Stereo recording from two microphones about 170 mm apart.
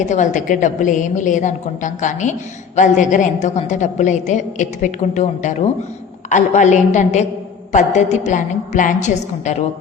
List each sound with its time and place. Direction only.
0.0 s a woman's voice: 45° left (ahead or behind)